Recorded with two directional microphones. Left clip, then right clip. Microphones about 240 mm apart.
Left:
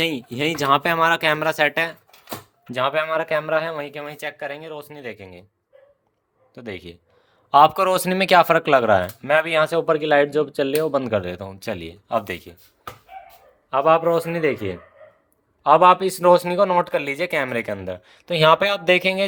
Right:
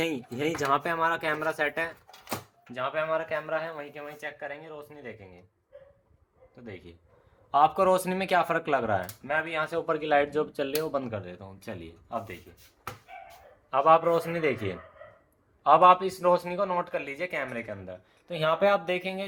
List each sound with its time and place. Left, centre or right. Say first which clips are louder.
0.0 s a man's voice: left 7 dB; left
6.5 s a man's voice: left 11 dB; left
13.7 s a man's voice: left 4 dB; left